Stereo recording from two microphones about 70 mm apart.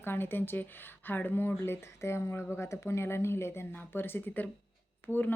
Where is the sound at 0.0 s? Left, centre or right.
Left.